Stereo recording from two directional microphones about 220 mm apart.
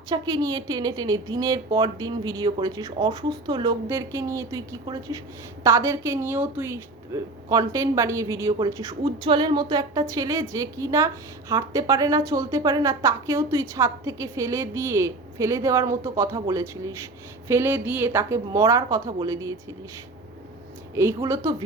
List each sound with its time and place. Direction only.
0.1 s a woman's voice: 15° right (ahead or behind)
20.9 s a woman's voice: 15° right (ahead or behind)